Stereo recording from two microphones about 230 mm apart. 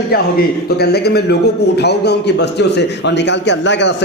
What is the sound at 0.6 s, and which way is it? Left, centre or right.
A man's voice, left.